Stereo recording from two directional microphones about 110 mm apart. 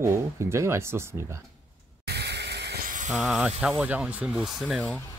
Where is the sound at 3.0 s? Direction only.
5° right (ahead or behind).